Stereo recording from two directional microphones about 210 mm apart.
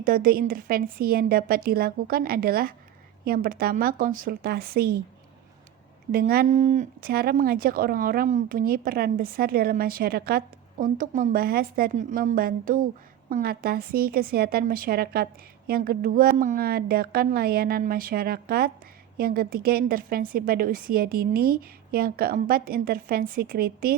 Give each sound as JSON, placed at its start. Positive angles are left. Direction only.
{"t": 0.0, "sound": "speech", "side_deg": -45}
{"t": 6.1, "sound": "speech", "side_deg": -45}